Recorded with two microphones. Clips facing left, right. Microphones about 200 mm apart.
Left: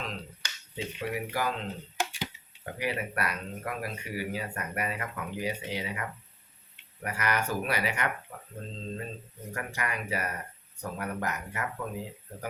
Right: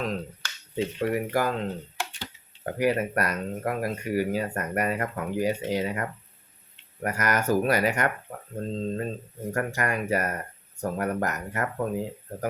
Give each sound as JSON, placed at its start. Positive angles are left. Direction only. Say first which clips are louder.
{"t": 0.8, "sound": "speech", "louder": "right 8 dB", "side_deg": -45}
{"t": 2.6, "sound": "speech", "louder": "right 9 dB", "side_deg": -45}